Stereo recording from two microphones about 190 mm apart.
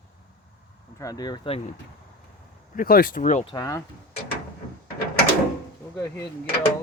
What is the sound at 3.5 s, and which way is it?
Speech, 15° left (ahead or behind).